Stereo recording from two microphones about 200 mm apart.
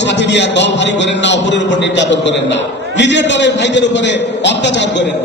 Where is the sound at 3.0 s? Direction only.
60° left (ahead or behind).